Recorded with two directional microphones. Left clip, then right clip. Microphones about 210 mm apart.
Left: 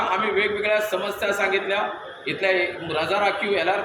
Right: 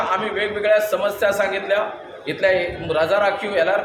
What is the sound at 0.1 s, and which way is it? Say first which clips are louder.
A man's voice: even; 20° right (ahead or behind).